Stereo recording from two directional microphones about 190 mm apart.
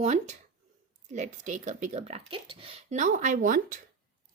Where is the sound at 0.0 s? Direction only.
40° right (ahead or behind).